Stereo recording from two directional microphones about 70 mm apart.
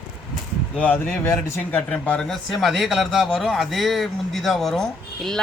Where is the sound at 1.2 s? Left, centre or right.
Left.